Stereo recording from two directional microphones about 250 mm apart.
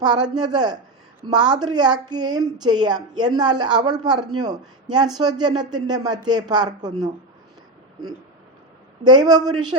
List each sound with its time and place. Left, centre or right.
0.0 s a woman's voice: centre
9.0 s a woman's voice: centre